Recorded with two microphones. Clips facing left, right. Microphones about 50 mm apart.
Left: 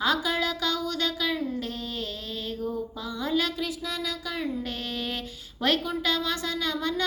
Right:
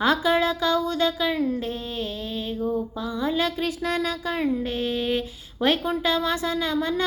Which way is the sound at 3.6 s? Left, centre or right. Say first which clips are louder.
Right 6 dB; right.